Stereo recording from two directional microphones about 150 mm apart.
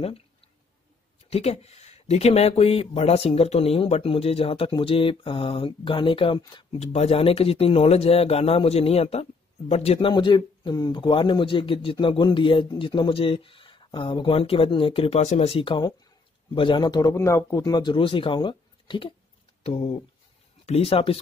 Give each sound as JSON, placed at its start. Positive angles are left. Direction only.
{"t": 1.3, "sound": "speech", "side_deg": 45}
{"t": 6.8, "sound": "speech", "side_deg": 45}
{"t": 20.6, "sound": "speech", "side_deg": 40}